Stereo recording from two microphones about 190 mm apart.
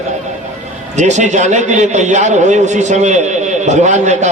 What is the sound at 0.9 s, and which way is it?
A man's voice, 40° right (ahead or behind).